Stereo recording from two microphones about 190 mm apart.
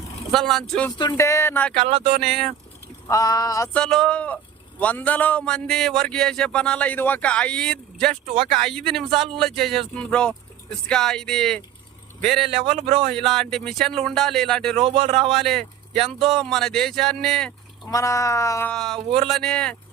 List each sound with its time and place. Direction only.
0.3 s speech: centre (ahead or behind)
0.9 s speech: 20° left (ahead or behind)
1.8 s speech: 30° right (ahead or behind)
2.2 s speech: centre (ahead or behind)
3.1 s speech: 20° left (ahead or behind)
3.7 s speech: 5° left (ahead or behind)
12.5 s speech: 30° right (ahead or behind)
13.1 s speech: centre (ahead or behind)
14.8 s speech: 30° right (ahead or behind)
15.3 s speech: centre (ahead or behind)
17.9 s speech: 15° left (ahead or behind)
18.7 s speech: centre (ahead or behind)